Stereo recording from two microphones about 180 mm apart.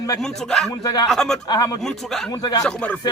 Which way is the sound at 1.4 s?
20° left (ahead or behind).